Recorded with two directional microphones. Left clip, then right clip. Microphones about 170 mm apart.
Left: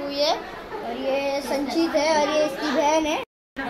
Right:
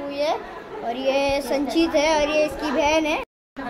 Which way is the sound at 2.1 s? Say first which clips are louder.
Right 1 dB; 20° right (ahead or behind).